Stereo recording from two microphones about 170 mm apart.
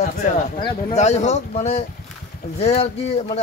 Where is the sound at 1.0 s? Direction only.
40° left (ahead or behind).